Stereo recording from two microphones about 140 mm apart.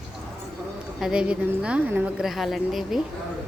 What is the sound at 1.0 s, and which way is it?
A woman's voice, 5° right (ahead or behind).